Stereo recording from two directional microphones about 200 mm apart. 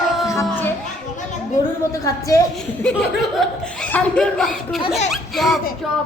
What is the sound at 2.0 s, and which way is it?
Speech, 15° left (ahead or behind).